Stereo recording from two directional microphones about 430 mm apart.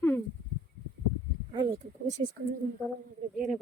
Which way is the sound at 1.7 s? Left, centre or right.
Centre.